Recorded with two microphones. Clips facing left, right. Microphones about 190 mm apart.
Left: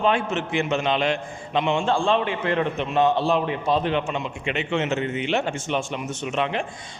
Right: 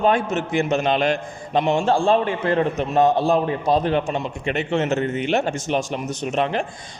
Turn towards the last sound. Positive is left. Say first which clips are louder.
# right 3 dB
turn(degrees=-40)  # may be behind; listen again after turning